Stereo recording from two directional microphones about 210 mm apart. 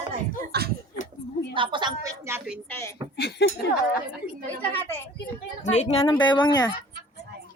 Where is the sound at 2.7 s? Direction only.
10° left (ahead or behind).